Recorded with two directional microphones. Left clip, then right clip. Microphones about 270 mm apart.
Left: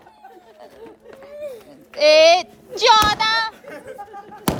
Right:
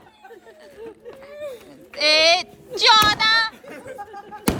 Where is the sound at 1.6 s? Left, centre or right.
Centre.